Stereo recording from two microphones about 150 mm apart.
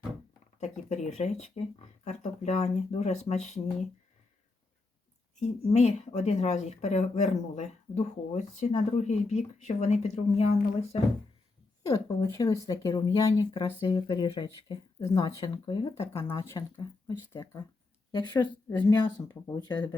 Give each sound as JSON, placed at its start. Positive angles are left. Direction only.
{"t": 0.6, "sound": "speech", "side_deg": 50}
{"t": 5.4, "sound": "speech", "side_deg": 45}
{"t": 11.9, "sound": "speech", "side_deg": 20}